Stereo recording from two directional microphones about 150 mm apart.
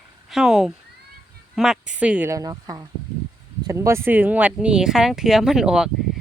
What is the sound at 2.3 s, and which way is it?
A woman's voice, 25° right (ahead or behind).